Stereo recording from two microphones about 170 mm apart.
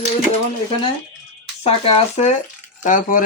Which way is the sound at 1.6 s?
40° left (ahead or behind).